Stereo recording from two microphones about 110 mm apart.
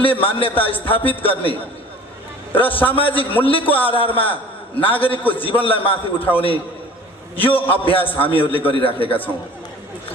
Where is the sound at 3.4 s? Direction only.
55° left (ahead or behind).